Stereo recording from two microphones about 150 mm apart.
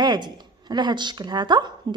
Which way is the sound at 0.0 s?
30° right (ahead or behind).